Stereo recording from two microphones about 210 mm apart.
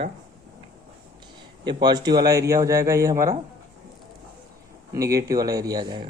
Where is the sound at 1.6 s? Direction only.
20° right (ahead or behind).